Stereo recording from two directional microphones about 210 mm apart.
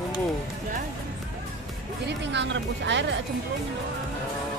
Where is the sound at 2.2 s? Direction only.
55° right (ahead or behind).